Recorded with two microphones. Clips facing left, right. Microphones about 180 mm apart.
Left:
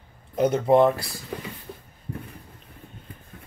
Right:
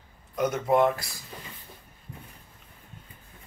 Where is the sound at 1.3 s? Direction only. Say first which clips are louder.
Left 11 dB; 70° left (ahead or behind).